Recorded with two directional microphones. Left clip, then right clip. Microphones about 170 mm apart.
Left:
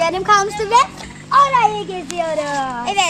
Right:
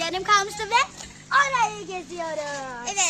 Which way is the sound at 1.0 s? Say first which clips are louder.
Left 8 dB; centre (ahead or behind).